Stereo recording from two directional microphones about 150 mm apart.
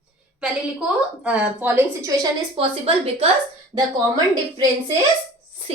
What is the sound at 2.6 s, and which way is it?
A woman's voice, 40° right (ahead or behind).